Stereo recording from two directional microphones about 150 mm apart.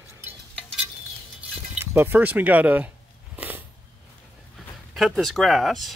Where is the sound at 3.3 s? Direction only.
10° right (ahead or behind).